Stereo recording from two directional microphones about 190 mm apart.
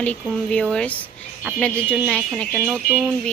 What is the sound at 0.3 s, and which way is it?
A woman's voice, 5° left (ahead or behind).